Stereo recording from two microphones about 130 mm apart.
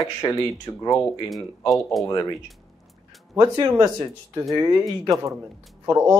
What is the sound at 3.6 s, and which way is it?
Speech, 20° right (ahead or behind).